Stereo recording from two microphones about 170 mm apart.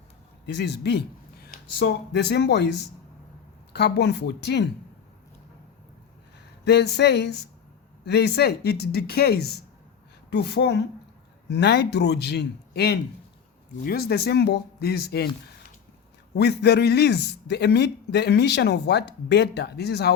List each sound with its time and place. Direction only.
0.4 s speech: 90° left
6.7 s a man's voice: 75° left (ahead or behind)
13.8 s a man's voice: 65° left (ahead or behind)
16.3 s a man's voice: 75° left (ahead or behind)